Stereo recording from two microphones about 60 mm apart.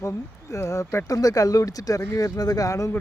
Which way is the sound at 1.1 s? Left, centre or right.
Left.